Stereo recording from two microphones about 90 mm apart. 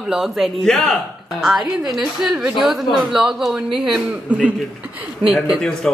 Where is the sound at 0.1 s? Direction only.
5° right (ahead or behind).